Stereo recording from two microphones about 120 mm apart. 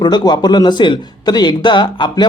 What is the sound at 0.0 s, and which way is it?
A man's voice, 35° left (ahead or behind).